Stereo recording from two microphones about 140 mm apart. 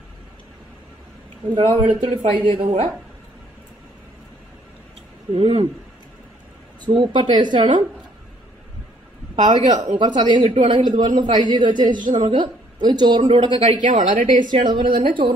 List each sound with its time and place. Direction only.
1.5 s speech: 40° right (ahead or behind)
5.3 s speech: 45° right (ahead or behind)
6.8 s speech: 35° right (ahead or behind)
9.9 s speech: 35° right (ahead or behind)
12.0 s a woman's voice: 65° right (ahead or behind)
12.3 s speech: 35° right (ahead or behind)
13.8 s a woman's voice: 65° right (ahead or behind)
14.7 s speech: 35° right (ahead or behind)